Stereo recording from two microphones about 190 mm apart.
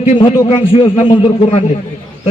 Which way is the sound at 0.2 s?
25° left (ahead or behind).